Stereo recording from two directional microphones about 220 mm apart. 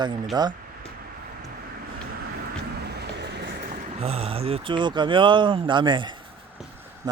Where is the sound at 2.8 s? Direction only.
50° right (ahead or behind).